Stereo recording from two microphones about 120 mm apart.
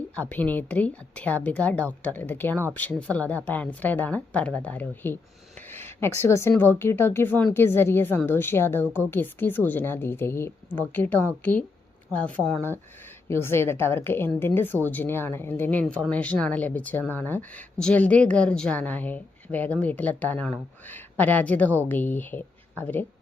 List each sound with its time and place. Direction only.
0.2 s a woman's voice: 10° left (ahead or behind)
5.6 s a sound: 20° left (ahead or behind)
6.6 s a woman's voice: 20° left (ahead or behind)